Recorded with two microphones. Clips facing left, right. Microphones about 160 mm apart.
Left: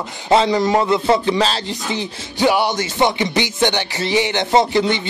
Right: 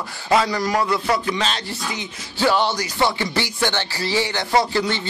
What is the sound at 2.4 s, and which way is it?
A man's voice, 15° left (ahead or behind).